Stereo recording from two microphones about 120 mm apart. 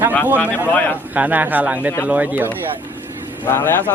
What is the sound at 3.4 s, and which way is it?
Speech, 20° left (ahead or behind).